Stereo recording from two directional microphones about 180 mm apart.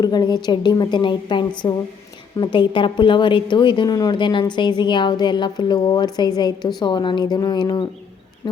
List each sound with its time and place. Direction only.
0.0 s a woman's voice: 25° left (ahead or behind)